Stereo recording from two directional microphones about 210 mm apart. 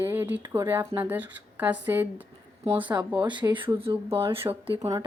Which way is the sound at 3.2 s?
20° right (ahead or behind).